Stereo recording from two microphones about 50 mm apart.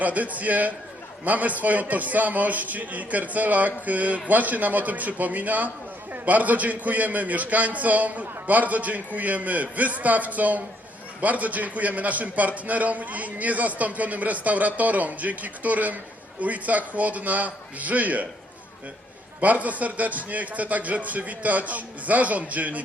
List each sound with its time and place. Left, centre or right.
0.0 s a man's voice: right
19.4 s a man's voice: right